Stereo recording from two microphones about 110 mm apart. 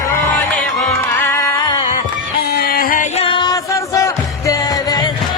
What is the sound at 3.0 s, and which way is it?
Music, 75° left (ahead or behind).